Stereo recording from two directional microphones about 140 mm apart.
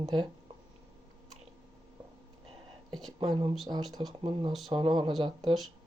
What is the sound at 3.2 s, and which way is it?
Speech, 35° right (ahead or behind).